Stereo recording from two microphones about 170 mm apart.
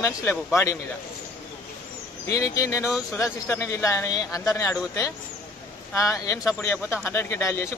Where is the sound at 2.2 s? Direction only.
20° left (ahead or behind).